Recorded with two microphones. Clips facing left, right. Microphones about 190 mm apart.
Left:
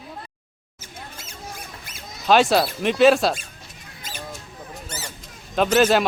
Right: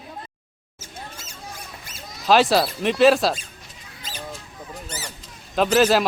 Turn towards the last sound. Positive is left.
turn(degrees=0)  # may be behind; listen again after turning